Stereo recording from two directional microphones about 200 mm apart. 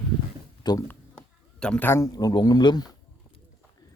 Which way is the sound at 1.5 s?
5° left (ahead or behind).